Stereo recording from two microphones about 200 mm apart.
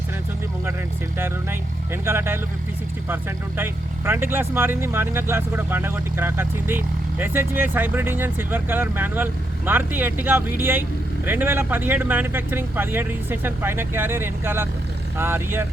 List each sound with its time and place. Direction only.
2.0 s speech: 10° right (ahead or behind)